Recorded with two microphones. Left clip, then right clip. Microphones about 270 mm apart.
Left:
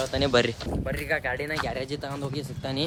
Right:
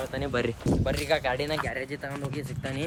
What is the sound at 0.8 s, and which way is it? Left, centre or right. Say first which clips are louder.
Speech: right 1 dB; centre.